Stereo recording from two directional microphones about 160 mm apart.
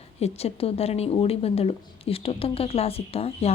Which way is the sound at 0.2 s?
40° left (ahead or behind).